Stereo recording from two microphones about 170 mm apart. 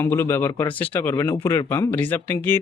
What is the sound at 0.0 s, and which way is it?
Speech, 15° left (ahead or behind).